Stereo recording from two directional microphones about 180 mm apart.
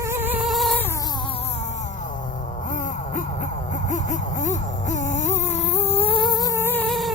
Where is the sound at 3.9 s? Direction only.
45° left (ahead or behind); by 6.9 s 10° left (ahead or behind).